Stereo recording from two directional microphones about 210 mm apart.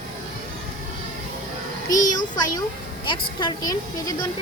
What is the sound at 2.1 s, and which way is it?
A woman's voice, 20° left (ahead or behind).